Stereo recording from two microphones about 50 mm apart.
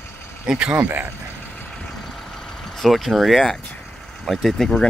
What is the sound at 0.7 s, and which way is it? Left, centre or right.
Speech, right.